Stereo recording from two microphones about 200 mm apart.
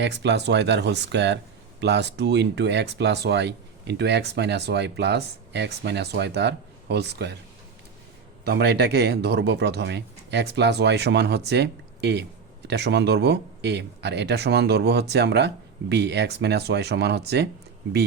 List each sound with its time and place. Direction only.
0.0 s speech: 60° right (ahead or behind)
8.4 s speech: 55° right (ahead or behind)